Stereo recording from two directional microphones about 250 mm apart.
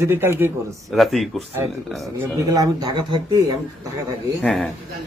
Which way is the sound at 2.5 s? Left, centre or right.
Centre.